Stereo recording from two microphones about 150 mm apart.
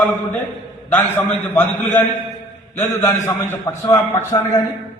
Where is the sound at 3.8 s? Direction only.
25° left (ahead or behind).